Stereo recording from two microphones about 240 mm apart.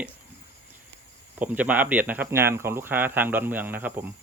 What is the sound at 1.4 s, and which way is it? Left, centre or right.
Speech, centre.